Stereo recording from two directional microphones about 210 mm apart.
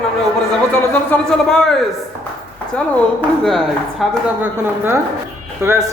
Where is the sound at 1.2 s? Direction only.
5° left (ahead or behind).